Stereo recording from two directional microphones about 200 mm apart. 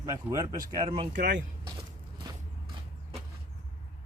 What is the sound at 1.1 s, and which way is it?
Speech, 60° right (ahead or behind).